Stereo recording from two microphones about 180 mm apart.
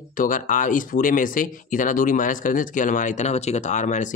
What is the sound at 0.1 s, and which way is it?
Speech, 50° left (ahead or behind).